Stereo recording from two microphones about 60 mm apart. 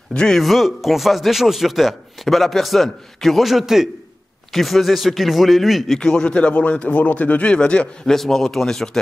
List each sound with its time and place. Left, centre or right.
0.1 s a man's voice: centre
0.4 s a man's voice: centre
5.9 s a man's voice: centre
8.1 s a man's voice: centre